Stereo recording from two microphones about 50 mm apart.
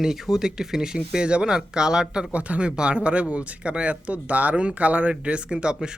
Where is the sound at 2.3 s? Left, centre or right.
Right.